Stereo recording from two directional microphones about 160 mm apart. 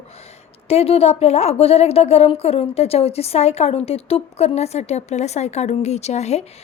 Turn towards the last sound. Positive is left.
turn(degrees=45)  # may be behind; listen again after turning